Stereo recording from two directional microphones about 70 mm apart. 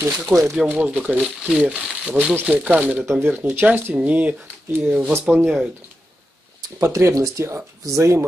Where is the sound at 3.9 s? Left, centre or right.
Centre.